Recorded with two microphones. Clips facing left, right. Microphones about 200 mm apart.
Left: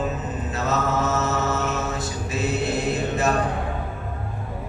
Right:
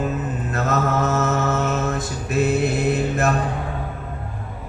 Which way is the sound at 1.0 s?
55° right (ahead or behind).